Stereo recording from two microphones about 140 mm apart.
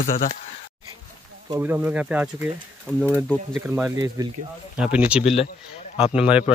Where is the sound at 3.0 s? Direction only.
10° left (ahead or behind).